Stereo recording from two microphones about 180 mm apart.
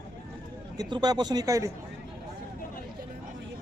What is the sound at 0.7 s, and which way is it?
Speech, 25° right (ahead or behind).